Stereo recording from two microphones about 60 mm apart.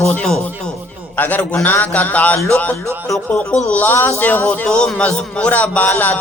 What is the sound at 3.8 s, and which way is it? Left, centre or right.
Speech, left.